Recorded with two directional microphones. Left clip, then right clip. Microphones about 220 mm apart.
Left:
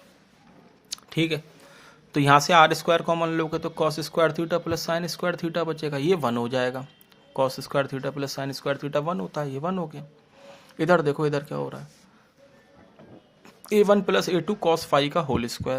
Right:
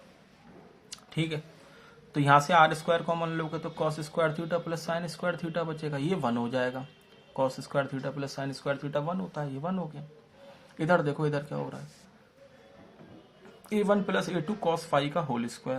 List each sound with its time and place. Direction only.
0.9 s a sound: 45° left (ahead or behind)
2.1 s speech: 45° left (ahead or behind)
13.7 s speech: 45° left (ahead or behind)